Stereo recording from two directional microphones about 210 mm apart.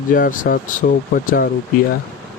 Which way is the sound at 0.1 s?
40° left (ahead or behind).